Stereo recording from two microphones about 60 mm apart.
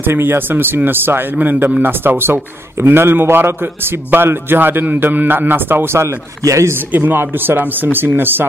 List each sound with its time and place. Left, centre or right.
0.0 s a man's voice: right
6.9 s a man's voice: right